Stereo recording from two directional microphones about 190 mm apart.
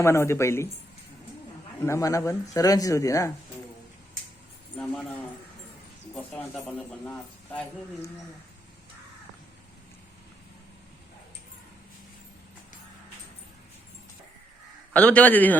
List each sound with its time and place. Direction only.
0.0 s a man's voice: 15° left (ahead or behind)
1.8 s a man's voice: 15° left (ahead or behind)
4.8 s speech: 5° left (ahead or behind)
6.1 s a man's voice: 5° left (ahead or behind)
14.9 s a man's voice: 5° left (ahead or behind)